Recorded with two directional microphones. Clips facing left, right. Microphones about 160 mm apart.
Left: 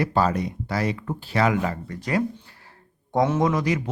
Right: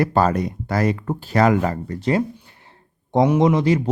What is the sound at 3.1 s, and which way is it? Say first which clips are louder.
Speech: right 5 dB; 20° right (ahead or behind).